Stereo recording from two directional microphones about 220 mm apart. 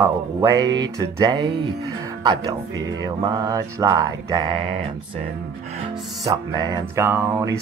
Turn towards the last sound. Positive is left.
turn(degrees=-15)  # may be behind; listen again after turning